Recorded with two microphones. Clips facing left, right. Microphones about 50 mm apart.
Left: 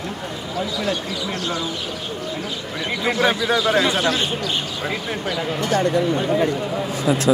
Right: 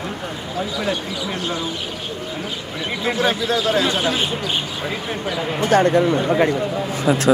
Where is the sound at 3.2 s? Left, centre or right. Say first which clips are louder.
Left 1 dB; left.